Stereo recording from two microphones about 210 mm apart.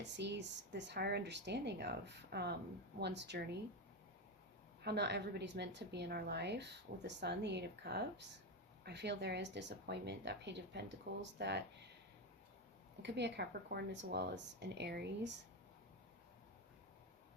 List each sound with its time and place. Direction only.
0.0 s a woman's voice: 55° right (ahead or behind)
4.8 s a woman's voice: 50° right (ahead or behind)
13.0 s a woman's voice: 55° right (ahead or behind)